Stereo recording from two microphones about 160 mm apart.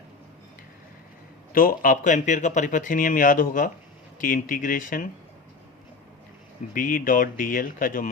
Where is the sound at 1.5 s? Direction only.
60° left (ahead or behind).